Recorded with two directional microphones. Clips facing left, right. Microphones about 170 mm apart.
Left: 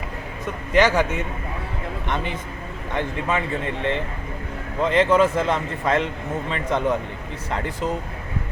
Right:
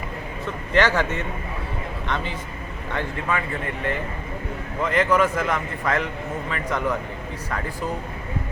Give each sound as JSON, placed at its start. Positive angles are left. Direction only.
{"t": 0.4, "sound": "a man's voice", "side_deg": 15}